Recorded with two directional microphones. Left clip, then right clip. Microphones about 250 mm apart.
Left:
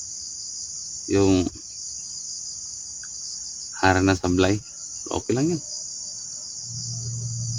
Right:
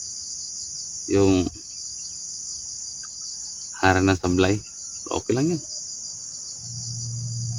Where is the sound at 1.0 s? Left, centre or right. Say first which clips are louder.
Even; centre.